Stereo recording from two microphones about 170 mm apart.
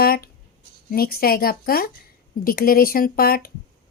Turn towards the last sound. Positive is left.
turn(degrees=60)  # may be behind; listen again after turning